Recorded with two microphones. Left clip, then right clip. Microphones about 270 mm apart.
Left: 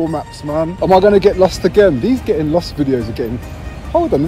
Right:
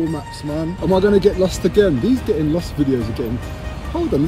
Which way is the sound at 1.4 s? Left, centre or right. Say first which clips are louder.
Left 6 dB; centre.